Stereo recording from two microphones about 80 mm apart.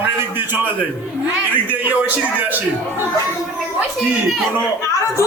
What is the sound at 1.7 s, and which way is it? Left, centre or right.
Speech, right.